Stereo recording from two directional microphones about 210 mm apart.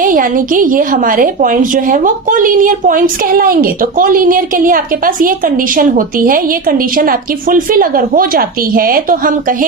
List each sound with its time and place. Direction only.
0.0 s a woman's voice: 40° right (ahead or behind)